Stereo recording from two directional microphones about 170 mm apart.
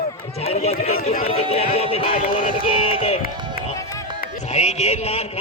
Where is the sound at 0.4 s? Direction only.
40° left (ahead or behind).